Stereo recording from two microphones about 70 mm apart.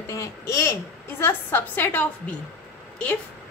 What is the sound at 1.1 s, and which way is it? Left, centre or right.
A woman's voice, left.